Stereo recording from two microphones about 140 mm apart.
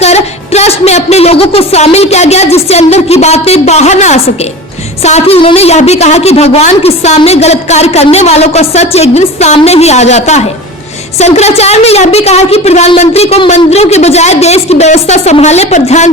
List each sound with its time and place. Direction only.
0.0 s speech: 50° left (ahead or behind)